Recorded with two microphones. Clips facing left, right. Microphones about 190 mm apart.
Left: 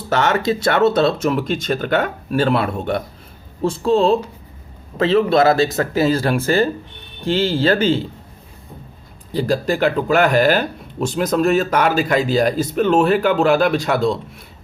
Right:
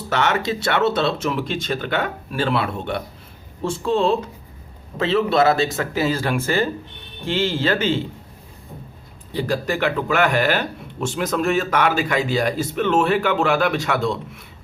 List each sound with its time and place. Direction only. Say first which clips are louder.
0.1 s speech: left 4 dB; 40° left (ahead or behind)
9.3 s speech: left 4 dB; 35° left (ahead or behind)